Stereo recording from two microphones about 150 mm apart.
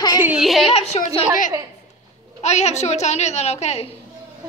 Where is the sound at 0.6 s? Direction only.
40° left (ahead or behind).